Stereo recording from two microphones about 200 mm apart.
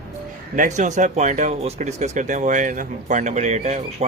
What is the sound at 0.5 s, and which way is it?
Speech, 40° right (ahead or behind).